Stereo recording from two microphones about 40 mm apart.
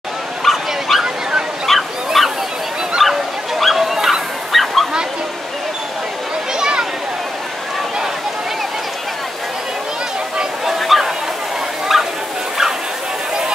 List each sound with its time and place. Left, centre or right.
0.5 s dog: centre
1.7 s bow-wow: centre
3.0 s dog: centre
6.6 s a sound: centre
10.8 s a sound: centre
11.9 s bow-wow: centre